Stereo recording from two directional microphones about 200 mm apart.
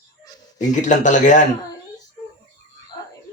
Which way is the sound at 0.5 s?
40° left (ahead or behind).